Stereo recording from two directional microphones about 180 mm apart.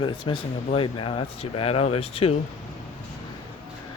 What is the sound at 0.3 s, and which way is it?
Speech, 30° left (ahead or behind).